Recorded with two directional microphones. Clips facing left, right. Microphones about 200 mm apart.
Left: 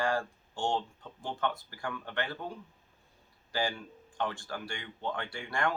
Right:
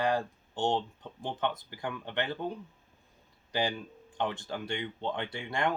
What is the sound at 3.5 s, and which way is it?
Speech, 20° right (ahead or behind).